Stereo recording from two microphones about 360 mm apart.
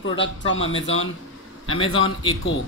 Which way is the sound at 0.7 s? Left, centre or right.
Centre.